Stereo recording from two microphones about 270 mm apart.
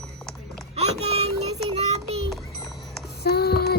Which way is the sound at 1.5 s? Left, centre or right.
Right.